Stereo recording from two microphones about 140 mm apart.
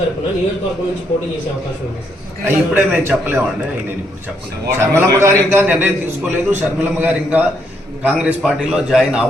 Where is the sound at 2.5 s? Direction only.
15° right (ahead or behind).